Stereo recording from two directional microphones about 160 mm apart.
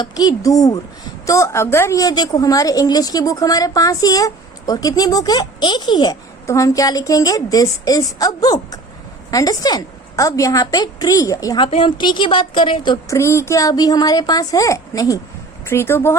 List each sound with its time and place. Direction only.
0.0 s a woman's voice: 25° left (ahead or behind)